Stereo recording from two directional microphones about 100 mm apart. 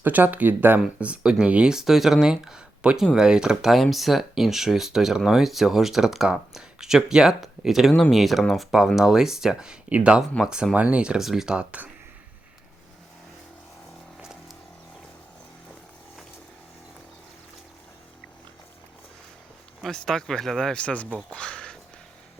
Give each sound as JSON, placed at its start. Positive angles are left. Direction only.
{"t": 0.0, "sound": "speech", "side_deg": -20}
{"t": 14.2, "sound": "a sound", "side_deg": -5}
{"t": 19.8, "sound": "speech", "side_deg": 5}